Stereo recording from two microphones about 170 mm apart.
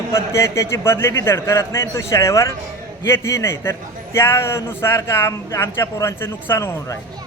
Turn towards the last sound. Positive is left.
turn(degrees=20)  # may be behind; listen again after turning